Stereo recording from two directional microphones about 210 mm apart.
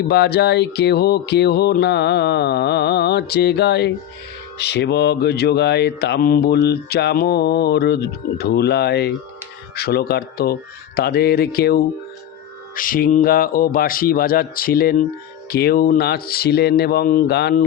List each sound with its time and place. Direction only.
0.1 s mantra: 50° left (ahead or behind)